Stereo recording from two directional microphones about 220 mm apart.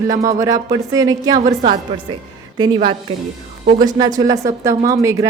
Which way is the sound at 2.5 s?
20° right (ahead or behind).